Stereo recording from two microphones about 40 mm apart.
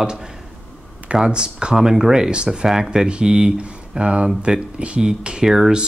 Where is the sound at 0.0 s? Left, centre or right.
Right.